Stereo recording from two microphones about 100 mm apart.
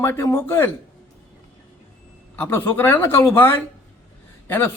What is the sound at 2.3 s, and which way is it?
A man's voice, 20° left (ahead or behind).